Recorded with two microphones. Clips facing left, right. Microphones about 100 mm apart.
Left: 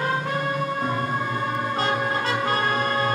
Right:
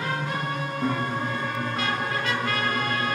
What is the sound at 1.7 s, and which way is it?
Brass instrument, 30° left (ahead or behind).